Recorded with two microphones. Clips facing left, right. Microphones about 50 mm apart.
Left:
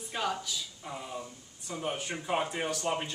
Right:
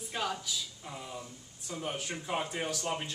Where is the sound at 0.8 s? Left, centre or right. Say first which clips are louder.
Left 3 dB; centre.